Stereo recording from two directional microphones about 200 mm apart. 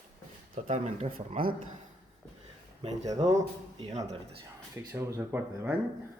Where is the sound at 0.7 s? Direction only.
35° right (ahead or behind).